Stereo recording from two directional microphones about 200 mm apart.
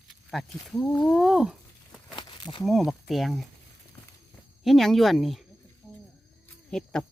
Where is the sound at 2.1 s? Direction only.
25° left (ahead or behind).